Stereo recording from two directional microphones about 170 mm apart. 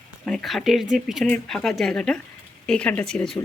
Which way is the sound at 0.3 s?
Centre (ahead or behind).